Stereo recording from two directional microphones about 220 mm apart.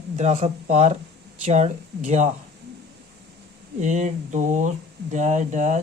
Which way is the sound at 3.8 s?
35° right (ahead or behind).